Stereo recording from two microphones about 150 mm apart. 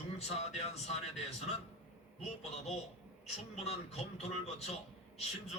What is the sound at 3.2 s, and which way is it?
A man's voice, 45° left (ahead or behind).